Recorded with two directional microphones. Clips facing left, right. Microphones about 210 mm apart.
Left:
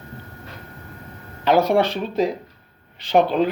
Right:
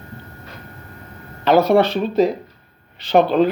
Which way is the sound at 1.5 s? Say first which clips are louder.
Right 3 dB; 15° left (ahead or behind).